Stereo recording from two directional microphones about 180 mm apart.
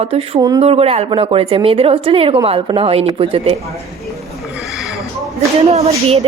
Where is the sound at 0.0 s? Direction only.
35° right (ahead or behind).